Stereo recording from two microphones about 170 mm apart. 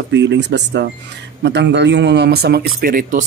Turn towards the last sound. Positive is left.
turn(degrees=-55)  # may be behind; listen again after turning